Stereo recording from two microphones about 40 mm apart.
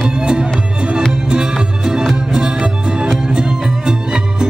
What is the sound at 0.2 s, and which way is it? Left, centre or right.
Music, right.